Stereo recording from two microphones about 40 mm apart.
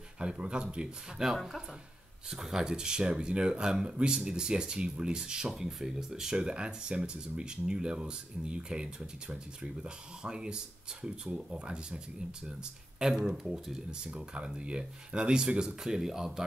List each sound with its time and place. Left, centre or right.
0.2 s speech: right
1.3 s speech: centre
5.5 s speech: centre; by 12.0 s right
13.2 s speech: centre
13.8 s speech: right